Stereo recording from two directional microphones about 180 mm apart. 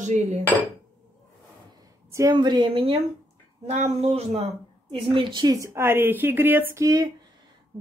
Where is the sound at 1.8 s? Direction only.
20° right (ahead or behind).